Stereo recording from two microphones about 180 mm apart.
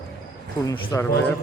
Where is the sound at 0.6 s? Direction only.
20° left (ahead or behind).